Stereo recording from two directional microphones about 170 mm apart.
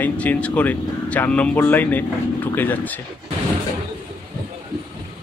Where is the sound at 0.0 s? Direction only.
10° left (ahead or behind).